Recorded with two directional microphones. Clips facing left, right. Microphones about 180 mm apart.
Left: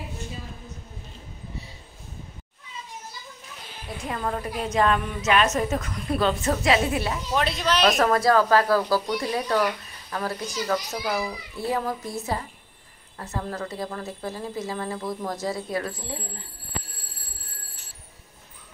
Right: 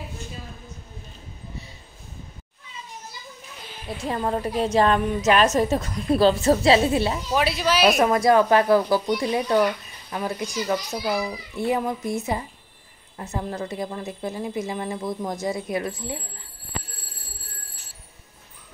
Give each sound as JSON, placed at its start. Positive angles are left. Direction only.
{"t": 4.1, "sound": "a woman's voice", "side_deg": -30}
{"t": 7.3, "sound": "speech", "side_deg": -5}
{"t": 8.0, "sound": "speech", "side_deg": -20}